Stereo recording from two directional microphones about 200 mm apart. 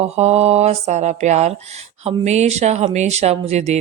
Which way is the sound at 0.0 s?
30° right (ahead or behind).